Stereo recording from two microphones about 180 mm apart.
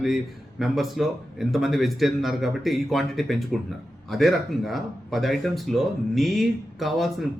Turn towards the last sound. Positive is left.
turn(degrees=0)  # may be behind; listen again after turning